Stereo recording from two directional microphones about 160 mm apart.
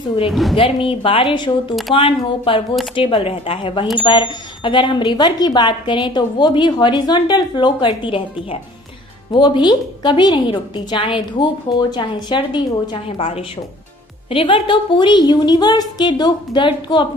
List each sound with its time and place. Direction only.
0.3 s a woman's voice: centre (ahead or behind)
0.5 s speech: 35° left (ahead or behind)